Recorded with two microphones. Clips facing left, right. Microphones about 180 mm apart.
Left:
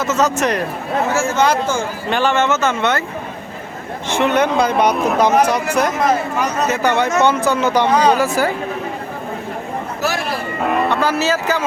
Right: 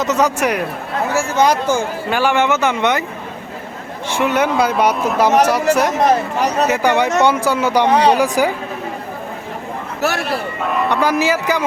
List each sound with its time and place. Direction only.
0.0 s speech: 15° right (ahead or behind)
4.1 s speech: 10° right (ahead or behind)
6.0 s speech: 35° right (ahead or behind)
6.7 s speech: 10° right (ahead or behind)
10.0 s a man's voice: 65° right (ahead or behind)
10.8 s speech: 15° right (ahead or behind)